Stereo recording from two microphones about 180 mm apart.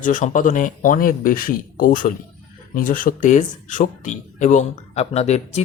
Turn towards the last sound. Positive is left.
turn(degrees=35)  # may be behind; listen again after turning